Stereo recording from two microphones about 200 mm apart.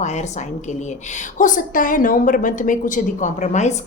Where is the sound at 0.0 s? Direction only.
35° left (ahead or behind).